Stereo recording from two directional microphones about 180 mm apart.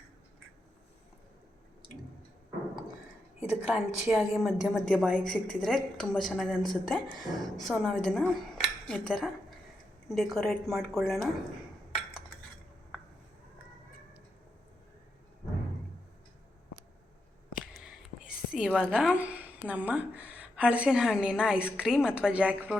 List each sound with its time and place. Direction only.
3.7 s speech: 5° right (ahead or behind)
17.7 s whispering: 5° right (ahead or behind)
18.5 s speech: 5° right (ahead or behind)
19.1 s a woman's voice: 10° right (ahead or behind)